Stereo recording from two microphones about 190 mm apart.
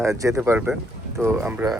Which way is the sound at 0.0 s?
15° right (ahead or behind).